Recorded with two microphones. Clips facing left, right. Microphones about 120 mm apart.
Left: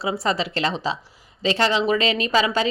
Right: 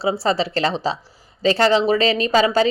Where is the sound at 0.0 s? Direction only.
30° right (ahead or behind).